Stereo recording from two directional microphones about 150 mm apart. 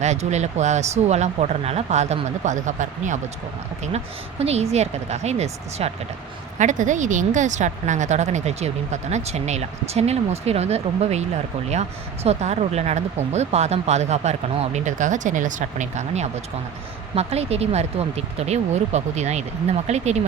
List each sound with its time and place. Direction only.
0.0 s speech: 50° right (ahead or behind)
3.9 s speech: 45° right (ahead or behind)